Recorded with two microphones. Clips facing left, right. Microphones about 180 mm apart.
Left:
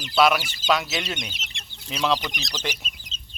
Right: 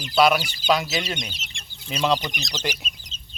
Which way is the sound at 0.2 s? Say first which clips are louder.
Right 1 dB; centre (ahead or behind).